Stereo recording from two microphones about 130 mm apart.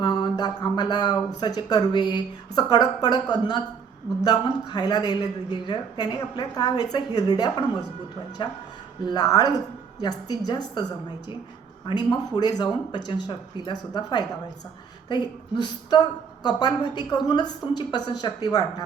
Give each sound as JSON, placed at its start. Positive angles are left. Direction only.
{"t": 0.0, "sound": "speech", "side_deg": 35}
{"t": 9.0, "sound": "a woman's voice", "side_deg": 30}
{"t": 11.9, "sound": "speech", "side_deg": 35}